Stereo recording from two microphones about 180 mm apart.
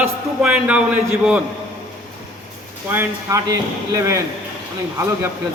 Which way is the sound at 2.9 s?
15° right (ahead or behind).